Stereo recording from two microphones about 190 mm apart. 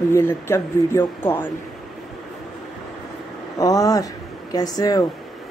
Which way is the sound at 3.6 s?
20° left (ahead or behind).